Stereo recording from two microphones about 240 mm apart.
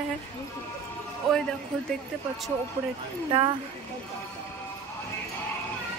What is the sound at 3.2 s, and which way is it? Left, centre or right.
Speech, right.